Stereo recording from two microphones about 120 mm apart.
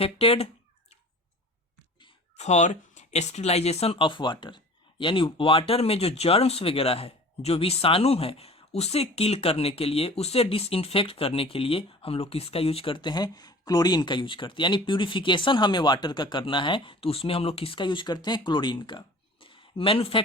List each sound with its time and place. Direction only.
0.0 s speech: 55° left (ahead or behind)
2.3 s speech: 70° left (ahead or behind); by 20.2 s 50° left (ahead or behind)